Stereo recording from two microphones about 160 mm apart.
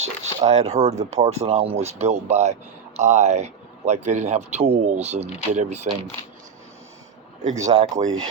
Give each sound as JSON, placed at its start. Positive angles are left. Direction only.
{"t": 0.0, "sound": "speech", "side_deg": -45}
{"t": 7.4, "sound": "speech", "side_deg": -45}